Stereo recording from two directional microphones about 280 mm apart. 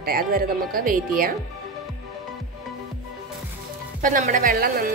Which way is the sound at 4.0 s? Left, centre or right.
Right.